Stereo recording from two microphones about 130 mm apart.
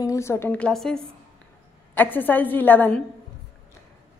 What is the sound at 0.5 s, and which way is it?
Speech, 5° left (ahead or behind).